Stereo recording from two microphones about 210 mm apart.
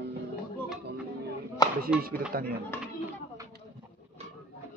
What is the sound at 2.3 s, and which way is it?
Speech, 45° right (ahead or behind).